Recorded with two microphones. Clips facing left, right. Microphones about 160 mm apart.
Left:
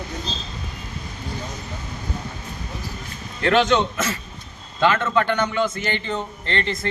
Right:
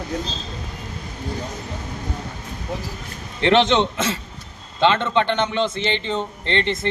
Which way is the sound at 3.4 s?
25° right (ahead or behind).